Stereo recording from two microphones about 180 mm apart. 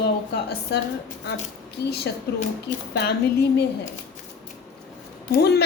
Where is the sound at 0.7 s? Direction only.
70° left (ahead or behind).